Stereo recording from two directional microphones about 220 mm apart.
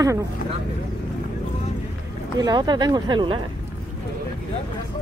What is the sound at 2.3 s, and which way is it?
Speech, 20° right (ahead or behind).